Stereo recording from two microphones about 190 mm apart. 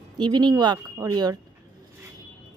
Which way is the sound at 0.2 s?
20° right (ahead or behind).